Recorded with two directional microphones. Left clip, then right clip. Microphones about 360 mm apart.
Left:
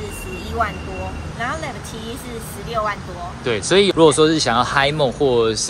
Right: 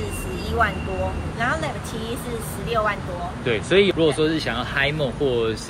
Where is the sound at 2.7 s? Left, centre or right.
Centre.